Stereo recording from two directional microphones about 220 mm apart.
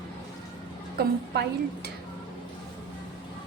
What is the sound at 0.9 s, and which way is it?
Speech, 45° right (ahead or behind).